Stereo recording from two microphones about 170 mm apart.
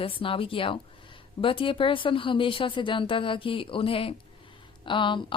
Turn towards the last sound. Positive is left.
turn(degrees=30)  # may be behind; listen again after turning